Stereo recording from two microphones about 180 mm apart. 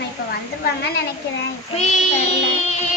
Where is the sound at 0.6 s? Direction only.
60° left (ahead or behind).